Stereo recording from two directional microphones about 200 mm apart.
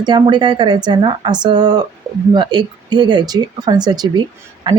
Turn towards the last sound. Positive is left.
turn(degrees=-20)  # may be behind; listen again after turning